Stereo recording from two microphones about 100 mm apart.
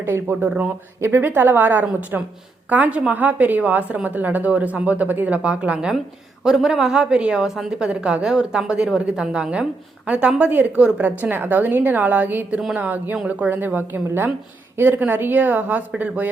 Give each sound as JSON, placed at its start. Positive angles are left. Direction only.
{"t": 0.0, "sound": "a woman's voice", "side_deg": -20}